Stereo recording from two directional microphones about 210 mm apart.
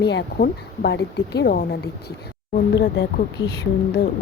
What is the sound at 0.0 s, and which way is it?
Speech, 55° left (ahead or behind).